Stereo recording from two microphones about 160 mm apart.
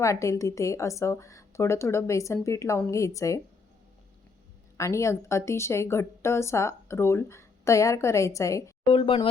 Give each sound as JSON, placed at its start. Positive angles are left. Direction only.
{"t": 0.0, "sound": "a woman's voice", "side_deg": 20}
{"t": 4.8, "sound": "a woman's voice", "side_deg": 20}
{"t": 8.9, "sound": "speech", "side_deg": 35}